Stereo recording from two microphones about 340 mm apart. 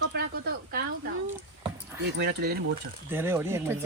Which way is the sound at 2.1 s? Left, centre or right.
Right.